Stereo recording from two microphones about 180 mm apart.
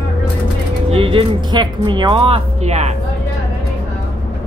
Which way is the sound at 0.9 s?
30° right (ahead or behind).